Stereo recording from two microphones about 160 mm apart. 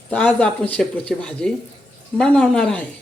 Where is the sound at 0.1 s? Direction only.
10° left (ahead or behind).